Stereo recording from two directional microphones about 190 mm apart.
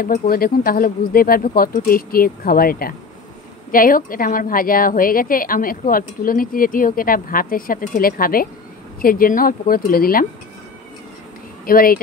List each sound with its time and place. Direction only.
0.3 s a woman's voice: 50° left (ahead or behind)
11.6 s speech: 50° left (ahead or behind)